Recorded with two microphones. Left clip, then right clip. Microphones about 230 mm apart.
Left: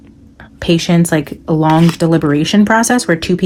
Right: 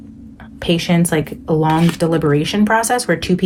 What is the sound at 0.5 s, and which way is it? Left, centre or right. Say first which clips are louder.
Speech: left 3 dB; left.